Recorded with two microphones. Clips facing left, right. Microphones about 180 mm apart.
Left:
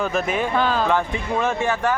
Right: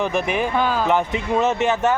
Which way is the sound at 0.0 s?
15° right (ahead or behind).